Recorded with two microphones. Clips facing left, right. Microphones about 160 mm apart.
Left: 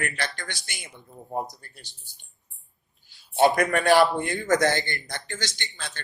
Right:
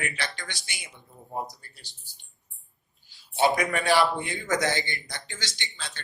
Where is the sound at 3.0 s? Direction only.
50° left (ahead or behind).